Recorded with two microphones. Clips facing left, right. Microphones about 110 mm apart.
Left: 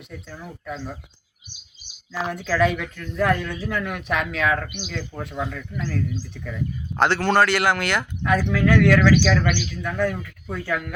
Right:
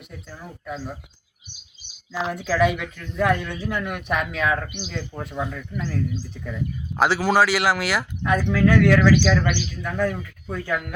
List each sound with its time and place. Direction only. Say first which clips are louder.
0.1 s speech: left 2 dB; 5° right (ahead or behind)
2.3 s speech: even; 5° right (ahead or behind)
4.9 s speech: even; 15° right (ahead or behind)